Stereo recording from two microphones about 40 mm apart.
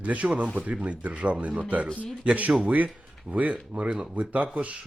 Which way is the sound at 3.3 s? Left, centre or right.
Right.